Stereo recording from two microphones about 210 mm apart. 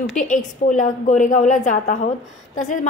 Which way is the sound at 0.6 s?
35° left (ahead or behind).